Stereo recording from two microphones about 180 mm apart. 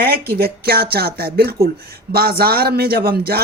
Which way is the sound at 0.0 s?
60° right (ahead or behind).